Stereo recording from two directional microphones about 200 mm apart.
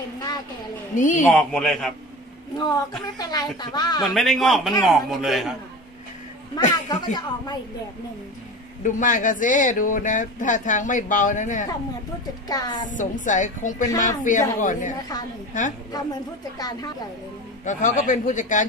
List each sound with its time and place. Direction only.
0.9 s speech: 40° left (ahead or behind)
1.3 s a man's voice: centre (ahead or behind)
2.5 s speech: 20° left (ahead or behind)
4.1 s a man's voice: centre (ahead or behind)
6.5 s speech: 20° left (ahead or behind)
8.8 s speech: 40° left (ahead or behind)
12.4 s speech: 20° left (ahead or behind)
12.8 s speech: 40° left (ahead or behind)
16.5 s speech: 20° left (ahead or behind)
17.6 s speech: 40° left (ahead or behind)